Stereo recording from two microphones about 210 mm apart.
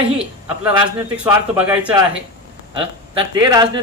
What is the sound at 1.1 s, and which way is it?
Speech, 5° right (ahead or behind).